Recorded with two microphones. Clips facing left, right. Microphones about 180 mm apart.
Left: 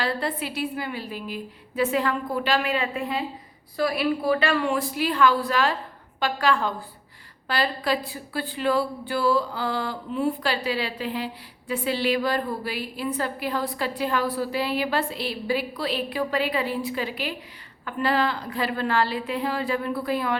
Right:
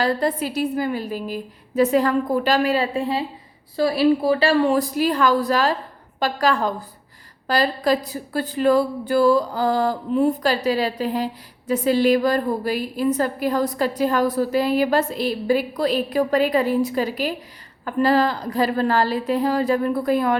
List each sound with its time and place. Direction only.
0.0 s a woman's voice: 40° right (ahead or behind)